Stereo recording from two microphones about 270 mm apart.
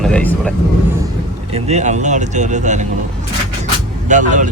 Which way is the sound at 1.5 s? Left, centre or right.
Right.